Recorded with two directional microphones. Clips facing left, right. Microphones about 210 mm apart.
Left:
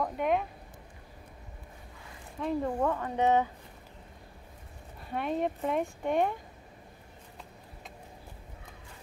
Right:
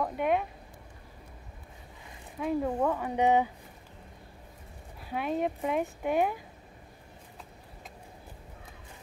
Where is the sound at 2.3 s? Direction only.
5° right (ahead or behind).